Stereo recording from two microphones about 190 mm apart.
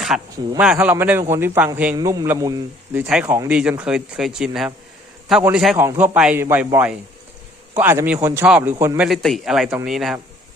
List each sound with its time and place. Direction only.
0.1 s a man's voice: 5° right (ahead or behind)
9.0 s speech: centre (ahead or behind)